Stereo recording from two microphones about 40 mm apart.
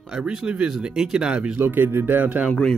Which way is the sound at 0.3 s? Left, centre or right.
Right.